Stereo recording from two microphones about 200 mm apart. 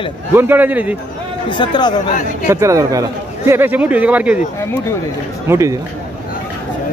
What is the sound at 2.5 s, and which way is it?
A man's voice, 15° right (ahead or behind).